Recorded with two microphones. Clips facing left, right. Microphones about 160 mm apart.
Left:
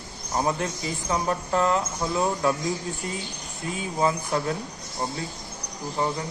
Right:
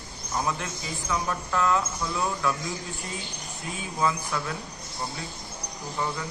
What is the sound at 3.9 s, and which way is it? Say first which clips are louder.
Speech: left 3 dB; 35° left (ahead or behind).